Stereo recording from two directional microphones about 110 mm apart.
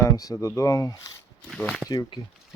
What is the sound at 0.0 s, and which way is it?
Speech, 35° left (ahead or behind).